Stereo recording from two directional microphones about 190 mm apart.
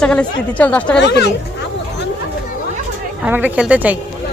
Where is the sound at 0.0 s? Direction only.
5° left (ahead or behind).